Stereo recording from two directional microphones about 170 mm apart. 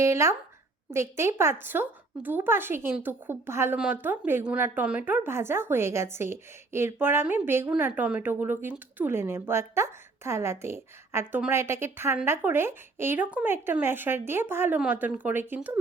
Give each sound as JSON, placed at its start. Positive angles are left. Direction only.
{"t": 0.0, "sound": "speech", "side_deg": -15}